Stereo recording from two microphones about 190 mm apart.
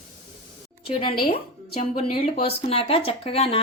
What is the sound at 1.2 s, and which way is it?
Speech, 50° left (ahead or behind).